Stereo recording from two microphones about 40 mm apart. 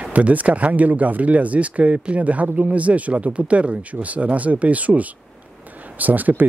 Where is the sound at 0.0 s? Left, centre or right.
Right.